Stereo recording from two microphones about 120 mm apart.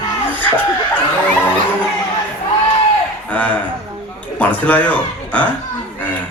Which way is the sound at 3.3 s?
10° left (ahead or behind).